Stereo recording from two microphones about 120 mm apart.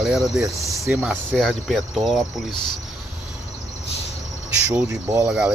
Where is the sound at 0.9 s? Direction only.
15° right (ahead or behind).